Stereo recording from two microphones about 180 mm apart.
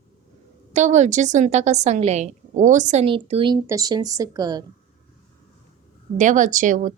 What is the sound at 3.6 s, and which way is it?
Speech, 20° right (ahead or behind).